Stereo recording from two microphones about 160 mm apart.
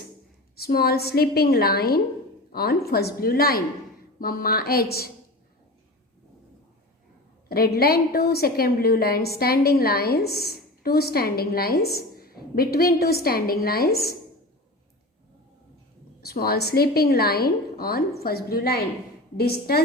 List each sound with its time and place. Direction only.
0.5 s a woman's voice: 75° left (ahead or behind)
7.4 s a woman's voice: 70° left (ahead or behind)
16.2 s a woman's voice: 70° left (ahead or behind)